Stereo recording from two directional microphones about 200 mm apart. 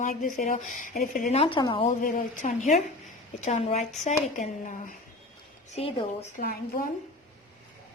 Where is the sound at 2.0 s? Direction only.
40° left (ahead or behind).